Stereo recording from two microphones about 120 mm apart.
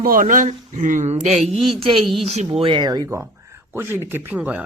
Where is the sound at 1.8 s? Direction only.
45° right (ahead or behind).